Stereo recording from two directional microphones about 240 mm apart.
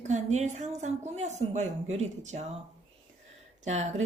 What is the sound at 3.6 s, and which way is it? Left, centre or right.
Speech, right.